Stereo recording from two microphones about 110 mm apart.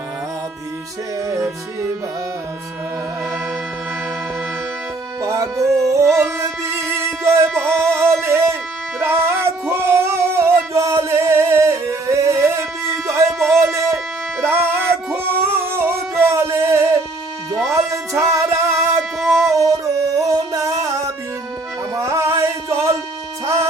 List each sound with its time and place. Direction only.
1.3 s music: 25° right (ahead or behind)
5.2 s music: 30° right (ahead or behind)
18.9 s a sound: centre (ahead or behind)
19.5 s music: 30° right (ahead or behind)